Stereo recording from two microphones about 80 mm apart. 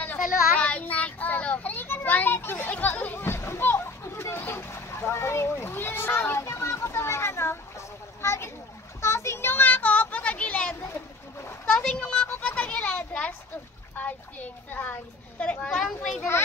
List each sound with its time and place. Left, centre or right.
0.0 s child singing: centre
4.4 s splash: left
8.2 s a sound: left; by 13.3 s centre
13.9 s children playing: left
15.8 s a child's voice: centre